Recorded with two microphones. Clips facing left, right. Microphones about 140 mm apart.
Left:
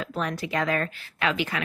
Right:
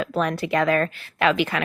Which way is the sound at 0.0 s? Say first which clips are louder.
Right 6 dB; 70° right (ahead or behind).